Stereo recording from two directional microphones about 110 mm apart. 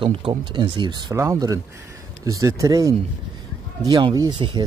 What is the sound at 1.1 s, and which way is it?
Speech, 25° right (ahead or behind).